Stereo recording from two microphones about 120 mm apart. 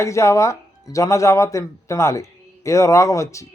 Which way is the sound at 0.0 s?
25° left (ahead or behind).